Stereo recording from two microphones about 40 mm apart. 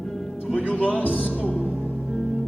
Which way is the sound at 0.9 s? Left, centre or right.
Left.